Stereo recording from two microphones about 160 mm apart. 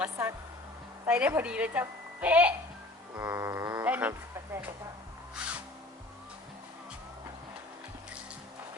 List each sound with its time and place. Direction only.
0.0 s a woman's voice: 15° right (ahead or behind)
3.2 s insect: 15° right (ahead or behind)
5.3 s music: 10° right (ahead or behind)